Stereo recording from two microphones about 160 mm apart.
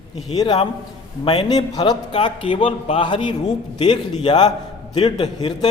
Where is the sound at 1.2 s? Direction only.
25° left (ahead or behind).